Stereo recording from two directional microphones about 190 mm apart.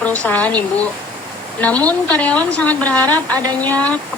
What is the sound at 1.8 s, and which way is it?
Speech, 5° left (ahead or behind).